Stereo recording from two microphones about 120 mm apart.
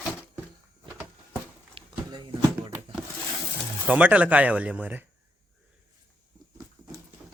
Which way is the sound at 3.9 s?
10° right (ahead or behind).